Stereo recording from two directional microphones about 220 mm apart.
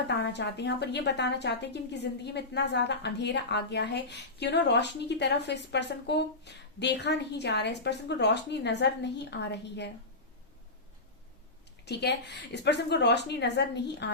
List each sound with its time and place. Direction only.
0.2 s a woman's voice: 50° left (ahead or behind)
11.9 s a woman's voice: 50° left (ahead or behind)